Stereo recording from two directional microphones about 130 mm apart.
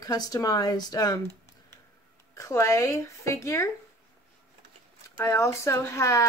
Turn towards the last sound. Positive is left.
turn(degrees=20)  # may be behind; listen again after turning